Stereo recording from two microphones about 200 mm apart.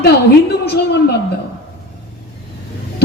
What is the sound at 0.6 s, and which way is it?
Speech, 55° left (ahead or behind).